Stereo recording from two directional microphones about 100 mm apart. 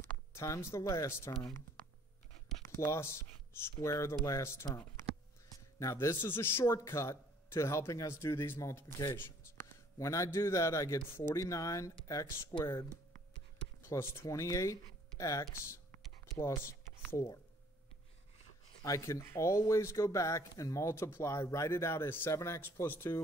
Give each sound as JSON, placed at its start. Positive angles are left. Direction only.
{"t": 0.3, "sound": "a man's voice", "side_deg": 30}
{"t": 2.7, "sound": "a man's voice", "side_deg": 25}
{"t": 5.8, "sound": "a man's voice", "side_deg": 30}
{"t": 13.8, "sound": "speech", "side_deg": 25}
{"t": 16.3, "sound": "a sound", "side_deg": 25}
{"t": 18.8, "sound": "a man's voice", "side_deg": 30}